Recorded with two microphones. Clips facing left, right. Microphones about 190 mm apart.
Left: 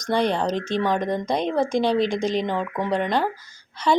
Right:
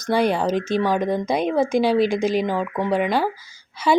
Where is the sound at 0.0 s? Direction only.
5° right (ahead or behind).